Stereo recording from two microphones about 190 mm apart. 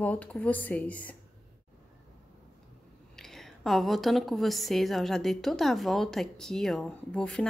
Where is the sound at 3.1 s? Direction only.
Centre (ahead or behind).